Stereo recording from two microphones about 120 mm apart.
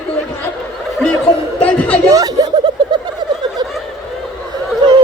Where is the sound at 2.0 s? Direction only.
30° right (ahead or behind).